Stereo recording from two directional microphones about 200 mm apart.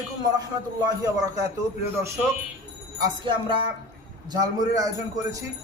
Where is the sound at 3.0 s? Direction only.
20° right (ahead or behind).